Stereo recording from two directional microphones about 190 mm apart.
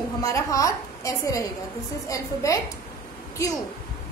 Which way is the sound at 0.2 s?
15° left (ahead or behind).